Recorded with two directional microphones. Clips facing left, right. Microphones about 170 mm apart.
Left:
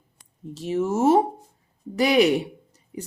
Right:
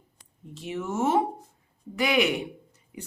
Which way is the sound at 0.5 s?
40° left (ahead or behind).